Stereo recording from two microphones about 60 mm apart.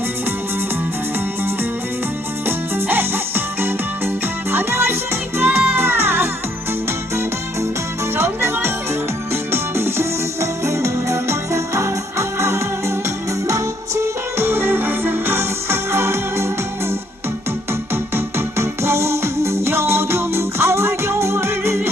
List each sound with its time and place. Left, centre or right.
2.5 s music: right
8.1 s music: right
17.9 s music: right